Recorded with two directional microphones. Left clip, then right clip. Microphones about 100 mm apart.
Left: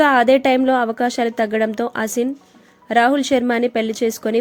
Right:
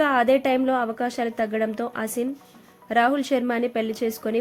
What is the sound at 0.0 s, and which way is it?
Speech, 50° left (ahead or behind).